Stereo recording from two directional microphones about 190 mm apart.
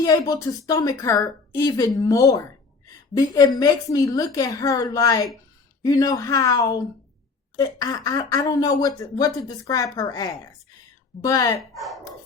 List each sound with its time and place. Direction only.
0.0 s speech: 20° left (ahead or behind)
11.7 s speech: centre (ahead or behind)